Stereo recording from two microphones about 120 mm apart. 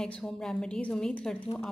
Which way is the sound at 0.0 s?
5° left (ahead or behind).